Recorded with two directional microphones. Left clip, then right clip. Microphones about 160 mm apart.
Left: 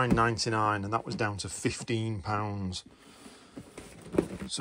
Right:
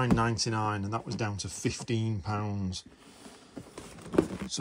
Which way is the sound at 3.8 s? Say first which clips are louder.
Right 2 dB; centre (ahead or behind).